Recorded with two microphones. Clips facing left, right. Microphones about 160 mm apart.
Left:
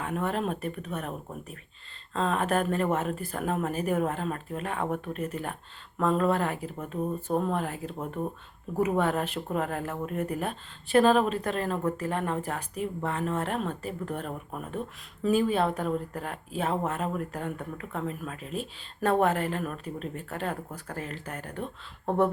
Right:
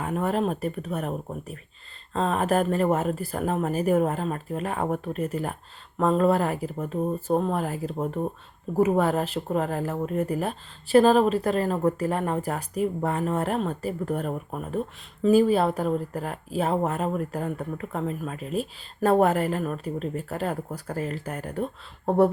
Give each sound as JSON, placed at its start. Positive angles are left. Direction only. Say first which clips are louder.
{"t": 0.0, "sound": "speech", "louder": "right 4 dB", "side_deg": -35}